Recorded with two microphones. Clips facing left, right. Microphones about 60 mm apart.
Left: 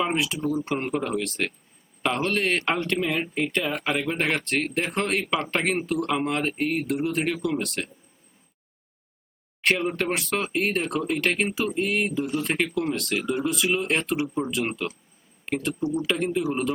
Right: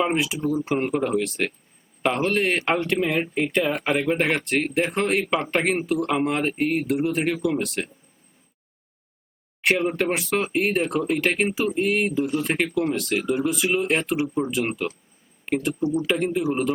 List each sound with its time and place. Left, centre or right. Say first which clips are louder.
0.0 s speech: right 2 dB; centre
9.6 s speech: right 2 dB; centre
14.8 s speech: right 3 dB; centre
15.5 s speech: right 3 dB; centre